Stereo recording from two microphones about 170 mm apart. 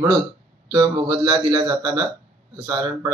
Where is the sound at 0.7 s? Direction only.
25° right (ahead or behind).